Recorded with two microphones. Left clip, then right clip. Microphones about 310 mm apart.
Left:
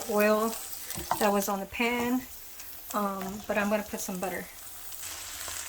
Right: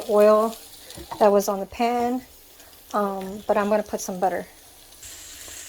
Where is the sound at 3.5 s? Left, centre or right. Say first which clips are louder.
Right 8 dB; centre.